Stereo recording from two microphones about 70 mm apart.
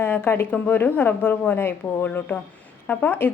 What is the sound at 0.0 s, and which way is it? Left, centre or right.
A woman's voice, left.